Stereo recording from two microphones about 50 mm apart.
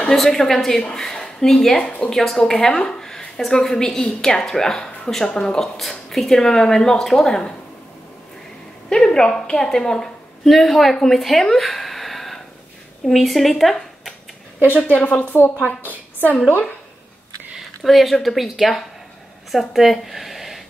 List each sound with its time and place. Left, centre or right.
0.0 s a woman's voice: centre
8.8 s a woman's voice: centre
15.0 s a woman's voice: left
17.6 s speech: centre